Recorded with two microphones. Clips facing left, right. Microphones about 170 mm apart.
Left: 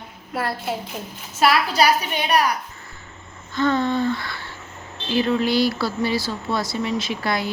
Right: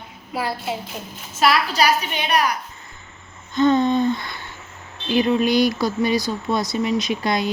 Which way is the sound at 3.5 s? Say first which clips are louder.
Right 4 dB; 20° right (ahead or behind).